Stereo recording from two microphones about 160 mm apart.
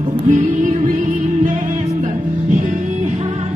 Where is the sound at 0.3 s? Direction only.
55° right (ahead or behind).